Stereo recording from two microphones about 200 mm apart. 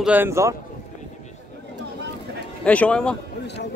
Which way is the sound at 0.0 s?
10° right (ahead or behind).